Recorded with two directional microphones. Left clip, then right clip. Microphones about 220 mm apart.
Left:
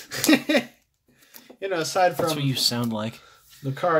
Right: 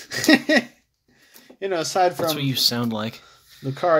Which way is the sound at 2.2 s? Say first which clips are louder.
Right 2 dB; centre (ahead or behind).